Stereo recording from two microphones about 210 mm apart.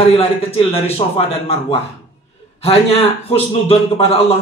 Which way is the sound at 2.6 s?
30° left (ahead or behind).